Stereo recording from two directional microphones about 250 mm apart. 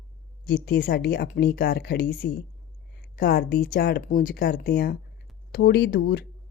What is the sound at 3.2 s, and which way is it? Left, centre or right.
A woman's voice, left.